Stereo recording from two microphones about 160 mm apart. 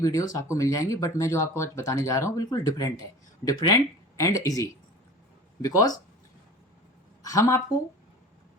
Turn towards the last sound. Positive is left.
turn(degrees=20)  # may be behind; listen again after turning